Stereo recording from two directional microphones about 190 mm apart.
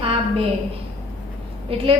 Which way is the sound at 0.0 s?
30° right (ahead or behind).